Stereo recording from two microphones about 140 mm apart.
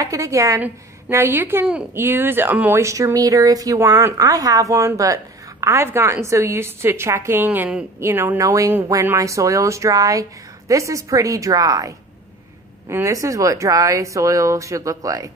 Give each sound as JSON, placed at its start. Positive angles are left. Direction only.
{"t": 0.0, "sound": "a woman's voice", "side_deg": -20}